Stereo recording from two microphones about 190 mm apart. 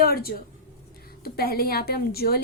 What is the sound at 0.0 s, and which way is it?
A woman's voice, 55° left (ahead or behind).